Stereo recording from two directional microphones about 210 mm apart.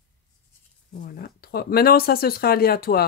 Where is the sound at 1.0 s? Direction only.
45° left (ahead or behind).